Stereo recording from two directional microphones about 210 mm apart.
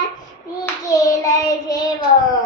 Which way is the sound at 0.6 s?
15° left (ahead or behind).